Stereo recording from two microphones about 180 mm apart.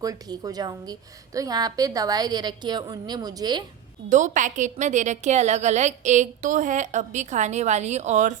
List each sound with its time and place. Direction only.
0.0 s a woman's voice: 20° right (ahead or behind)
4.1 s a woman's voice: 45° right (ahead or behind)